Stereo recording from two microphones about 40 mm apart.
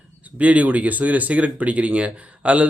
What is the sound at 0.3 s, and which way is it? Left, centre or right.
Speech, right.